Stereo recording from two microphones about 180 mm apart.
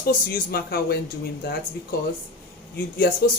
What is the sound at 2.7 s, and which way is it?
Speech, 55° left (ahead or behind).